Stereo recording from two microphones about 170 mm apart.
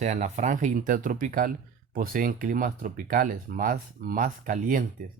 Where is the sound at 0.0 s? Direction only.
45° right (ahead or behind).